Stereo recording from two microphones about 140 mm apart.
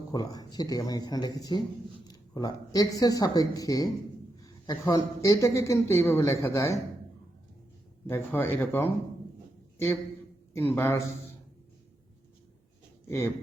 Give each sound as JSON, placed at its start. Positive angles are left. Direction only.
{"t": 0.1, "sound": "speech", "side_deg": 30}
{"t": 4.4, "sound": "a sound", "side_deg": 30}
{"t": 5.2, "sound": "speech", "side_deg": 25}
{"t": 8.0, "sound": "a man's voice", "side_deg": 15}
{"t": 13.1, "sound": "speech", "side_deg": 20}